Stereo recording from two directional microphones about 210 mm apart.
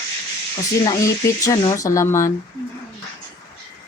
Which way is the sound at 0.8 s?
15° left (ahead or behind).